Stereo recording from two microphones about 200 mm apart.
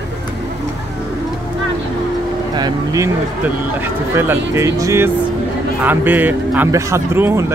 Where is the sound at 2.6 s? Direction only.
20° right (ahead or behind).